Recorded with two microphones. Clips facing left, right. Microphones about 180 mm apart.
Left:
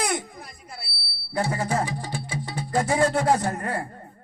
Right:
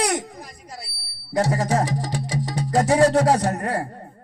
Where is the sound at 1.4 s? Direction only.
40° right (ahead or behind).